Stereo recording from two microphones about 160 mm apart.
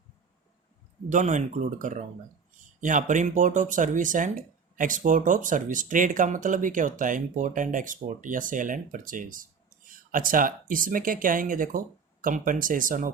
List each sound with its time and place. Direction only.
1.1 s speech: 50° right (ahead or behind)